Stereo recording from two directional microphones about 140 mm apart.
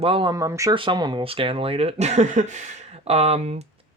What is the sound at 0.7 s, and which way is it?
Speech, 35° right (ahead or behind).